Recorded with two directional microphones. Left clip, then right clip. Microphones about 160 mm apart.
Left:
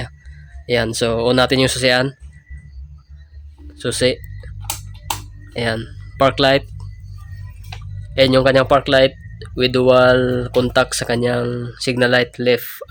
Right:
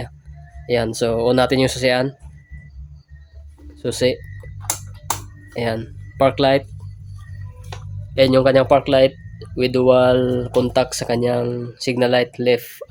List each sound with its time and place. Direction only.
0.7 s speech: 5° left (ahead or behind)
3.8 s speech: centre (ahead or behind)
5.5 s speech: 5° left (ahead or behind)
8.1 s speech: centre (ahead or behind)